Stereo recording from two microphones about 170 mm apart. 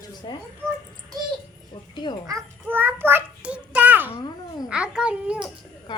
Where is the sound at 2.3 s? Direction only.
15° right (ahead or behind).